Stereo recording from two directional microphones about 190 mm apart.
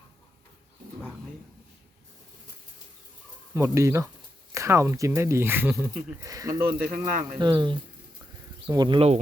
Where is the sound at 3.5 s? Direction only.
15° right (ahead or behind).